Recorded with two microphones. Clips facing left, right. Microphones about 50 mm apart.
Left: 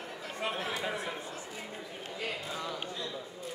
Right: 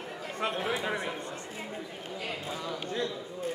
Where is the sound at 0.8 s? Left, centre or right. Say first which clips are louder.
Right 3 dB; centre.